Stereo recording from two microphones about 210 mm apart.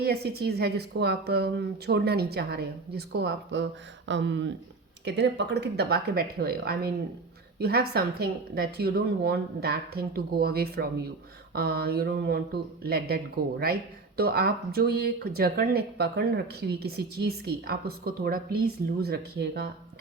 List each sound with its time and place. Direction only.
0.0 s speech: 50° right (ahead or behind)
14.2 s speech: 50° right (ahead or behind)